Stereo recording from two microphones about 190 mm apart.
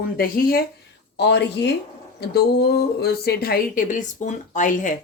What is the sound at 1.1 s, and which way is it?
A woman's voice, 65° left (ahead or behind).